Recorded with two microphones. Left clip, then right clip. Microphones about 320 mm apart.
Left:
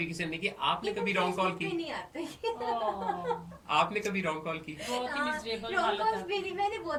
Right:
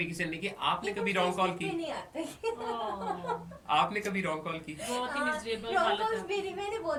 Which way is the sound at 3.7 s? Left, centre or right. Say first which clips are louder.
Even; centre.